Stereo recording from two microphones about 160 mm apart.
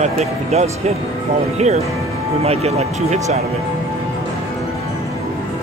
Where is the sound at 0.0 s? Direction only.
40° right (ahead or behind).